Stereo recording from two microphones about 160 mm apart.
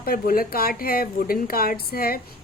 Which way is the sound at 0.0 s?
65° left (ahead or behind).